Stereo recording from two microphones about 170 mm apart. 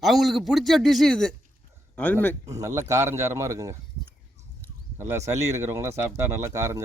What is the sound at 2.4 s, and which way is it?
Speech, 20° right (ahead or behind).